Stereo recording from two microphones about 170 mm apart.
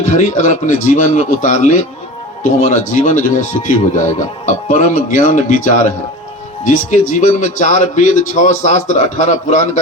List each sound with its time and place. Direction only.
0.0 s speech: 45° left (ahead or behind)